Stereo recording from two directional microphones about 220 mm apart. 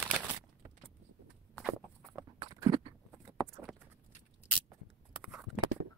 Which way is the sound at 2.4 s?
20° right (ahead or behind).